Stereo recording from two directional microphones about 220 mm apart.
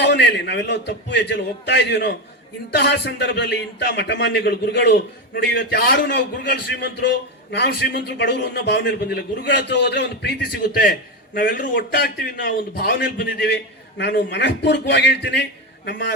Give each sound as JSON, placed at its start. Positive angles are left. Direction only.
{"t": 0.0, "sound": "speech", "side_deg": 50}
{"t": 11.3, "sound": "a man's voice", "side_deg": 40}